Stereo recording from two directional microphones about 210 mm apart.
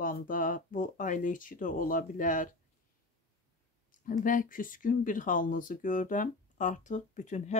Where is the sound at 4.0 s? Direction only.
40° left (ahead or behind).